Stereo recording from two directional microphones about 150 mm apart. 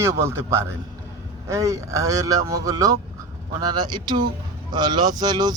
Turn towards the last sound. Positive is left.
turn(degrees=-25)  # may be behind; listen again after turning